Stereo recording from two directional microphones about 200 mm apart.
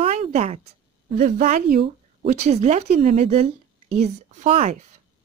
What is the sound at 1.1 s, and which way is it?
Speech, 45° right (ahead or behind).